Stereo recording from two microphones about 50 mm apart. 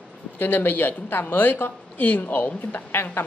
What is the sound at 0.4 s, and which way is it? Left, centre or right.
Speech, left.